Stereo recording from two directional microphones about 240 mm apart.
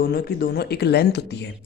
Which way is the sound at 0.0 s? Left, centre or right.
Left.